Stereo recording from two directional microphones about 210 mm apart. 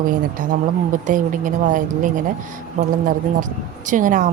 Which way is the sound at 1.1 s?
40° right (ahead or behind).